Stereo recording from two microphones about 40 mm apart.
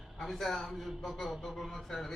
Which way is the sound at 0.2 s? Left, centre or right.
Centre.